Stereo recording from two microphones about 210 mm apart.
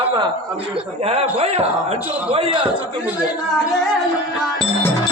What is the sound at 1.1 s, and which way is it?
Speech, 30° right (ahead or behind).